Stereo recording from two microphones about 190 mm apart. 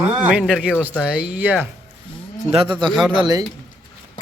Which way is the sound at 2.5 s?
25° right (ahead or behind).